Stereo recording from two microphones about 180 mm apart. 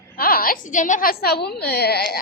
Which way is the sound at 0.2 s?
55° left (ahead or behind).